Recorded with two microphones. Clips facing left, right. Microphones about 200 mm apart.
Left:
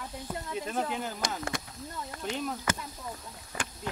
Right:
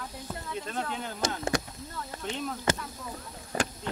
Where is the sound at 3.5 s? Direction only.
40° right (ahead or behind).